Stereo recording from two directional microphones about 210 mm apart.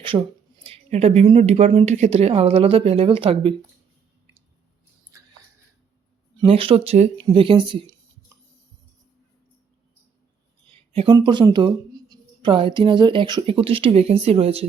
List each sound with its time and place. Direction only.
0.0 s speech: 25° right (ahead or behind)
6.4 s speech: 25° right (ahead or behind)
10.9 s speech: 25° right (ahead or behind)